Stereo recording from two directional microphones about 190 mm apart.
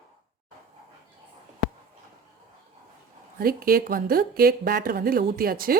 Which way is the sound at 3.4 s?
50° right (ahead or behind).